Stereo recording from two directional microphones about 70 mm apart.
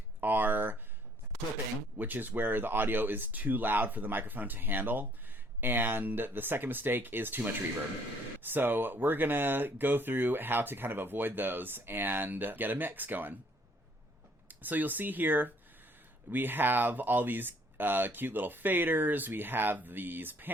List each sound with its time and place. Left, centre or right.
0.2 s a sound: right
2.0 s speech: right
14.4 s speech: right